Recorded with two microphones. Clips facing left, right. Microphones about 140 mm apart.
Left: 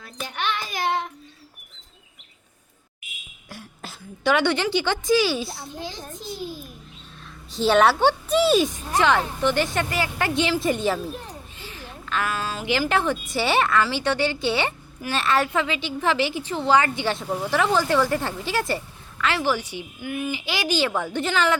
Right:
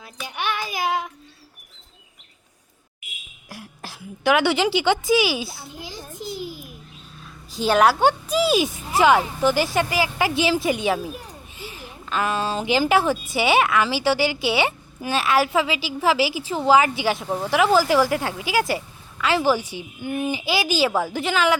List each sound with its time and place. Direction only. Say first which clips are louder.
0.3 s child singing: right 1 dB; 10° right (ahead or behind)
3.5 s a sound: right 1 dB; 5° right (ahead or behind)
5.0 s a sound: even; 5° right (ahead or behind)
7.2 s a woman's voice: left 2 dB; centre (ahead or behind)
20.1 s a child's voice: right 3 dB; 20° right (ahead or behind)
20.4 s a woman's voice: right 2 dB; 10° right (ahead or behind)